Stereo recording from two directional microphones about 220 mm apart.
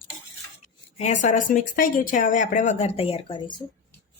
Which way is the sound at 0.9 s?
30° left (ahead or behind).